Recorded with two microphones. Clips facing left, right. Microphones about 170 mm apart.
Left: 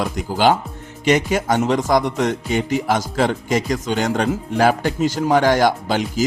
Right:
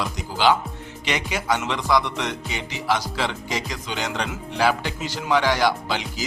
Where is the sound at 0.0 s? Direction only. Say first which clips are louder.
Left 4 dB; 50° left (ahead or behind).